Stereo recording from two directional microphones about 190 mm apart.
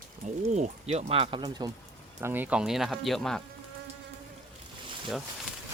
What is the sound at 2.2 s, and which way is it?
Speech, 10° right (ahead or behind).